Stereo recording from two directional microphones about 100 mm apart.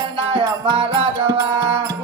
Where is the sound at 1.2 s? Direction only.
40° right (ahead or behind).